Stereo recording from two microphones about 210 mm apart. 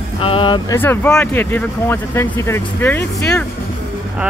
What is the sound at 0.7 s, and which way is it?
Speech, 10° left (ahead or behind).